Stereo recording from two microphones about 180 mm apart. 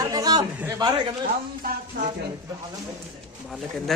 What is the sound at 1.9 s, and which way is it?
Speech, 70° right (ahead or behind).